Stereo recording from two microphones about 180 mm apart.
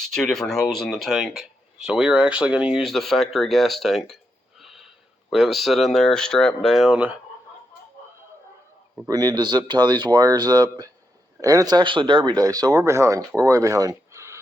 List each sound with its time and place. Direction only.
0.1 s speech: centre (ahead or behind)
9.0 s speech: 20° right (ahead or behind)